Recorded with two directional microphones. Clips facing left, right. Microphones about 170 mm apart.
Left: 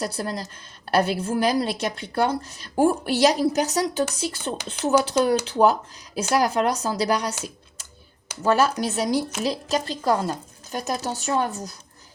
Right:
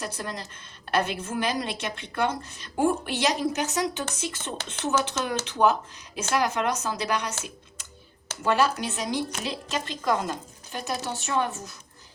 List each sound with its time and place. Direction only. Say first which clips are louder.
0.0 s a woman's voice: left 6 dB; 35° left (ahead or behind)
8.4 s a woman's voice: left 3 dB; 40° left (ahead or behind)